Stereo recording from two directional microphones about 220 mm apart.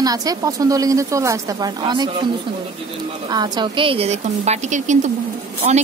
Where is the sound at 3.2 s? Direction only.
20° right (ahead or behind).